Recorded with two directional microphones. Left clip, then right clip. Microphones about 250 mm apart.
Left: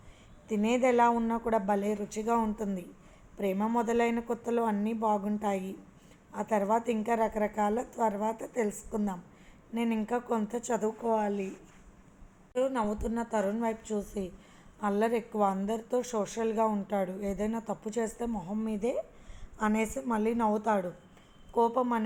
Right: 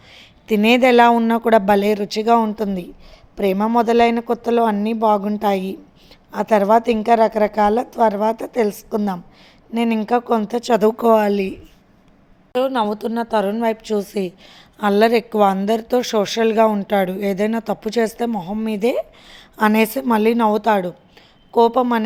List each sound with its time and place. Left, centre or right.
0.4 s a woman's voice: right
12.5 s a woman's voice: right